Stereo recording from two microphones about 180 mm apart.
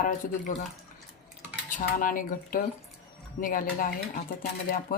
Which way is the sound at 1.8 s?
50° left (ahead or behind).